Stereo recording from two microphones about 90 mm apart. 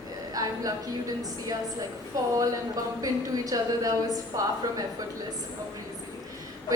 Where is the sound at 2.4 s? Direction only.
40° right (ahead or behind).